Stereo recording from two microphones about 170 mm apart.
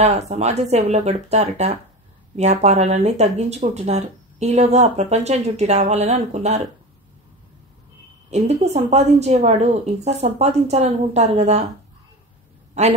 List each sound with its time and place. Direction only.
0.0 s speech: 40° right (ahead or behind)
8.3 s speech: 40° right (ahead or behind)
12.8 s a woman's voice: 40° right (ahead or behind)